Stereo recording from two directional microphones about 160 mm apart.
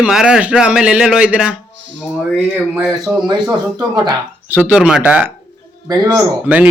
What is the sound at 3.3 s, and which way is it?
Speech, 25° right (ahead or behind).